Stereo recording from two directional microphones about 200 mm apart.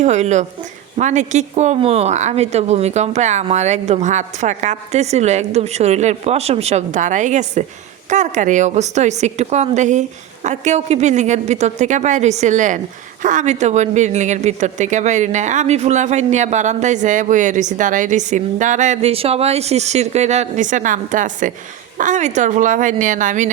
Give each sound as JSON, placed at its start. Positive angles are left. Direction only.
{"t": 0.0, "sound": "speech", "side_deg": -35}